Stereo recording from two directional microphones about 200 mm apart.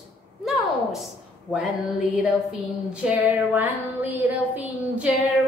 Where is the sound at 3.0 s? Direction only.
10° right (ahead or behind).